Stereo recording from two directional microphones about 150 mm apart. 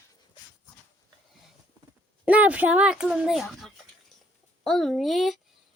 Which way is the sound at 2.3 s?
10° right (ahead or behind).